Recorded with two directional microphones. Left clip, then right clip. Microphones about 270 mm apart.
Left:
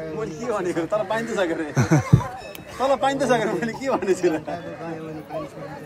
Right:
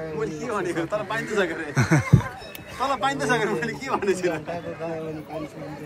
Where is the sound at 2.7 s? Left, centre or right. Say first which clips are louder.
Left 4 dB; left.